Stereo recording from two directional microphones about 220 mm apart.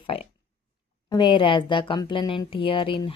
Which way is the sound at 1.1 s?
20° left (ahead or behind).